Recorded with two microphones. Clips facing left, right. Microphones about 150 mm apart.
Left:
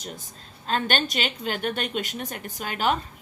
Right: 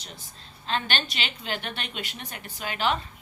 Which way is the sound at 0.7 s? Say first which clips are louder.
Left 4 dB; 45° left (ahead or behind).